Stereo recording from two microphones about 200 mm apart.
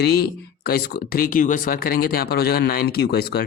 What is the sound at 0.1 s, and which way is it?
Speech, 50° left (ahead or behind).